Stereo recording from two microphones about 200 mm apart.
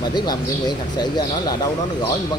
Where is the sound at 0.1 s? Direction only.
20° left (ahead or behind).